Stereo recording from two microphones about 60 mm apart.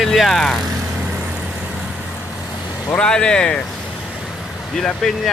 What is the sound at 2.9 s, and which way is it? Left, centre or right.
Speech, centre.